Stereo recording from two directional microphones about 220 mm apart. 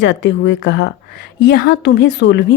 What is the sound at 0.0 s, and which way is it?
A woman's voice, 55° left (ahead or behind).